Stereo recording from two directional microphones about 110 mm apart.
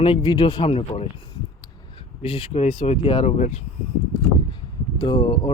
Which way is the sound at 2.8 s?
80° left.